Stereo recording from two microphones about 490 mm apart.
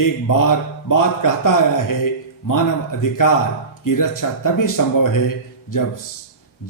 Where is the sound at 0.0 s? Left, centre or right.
Left.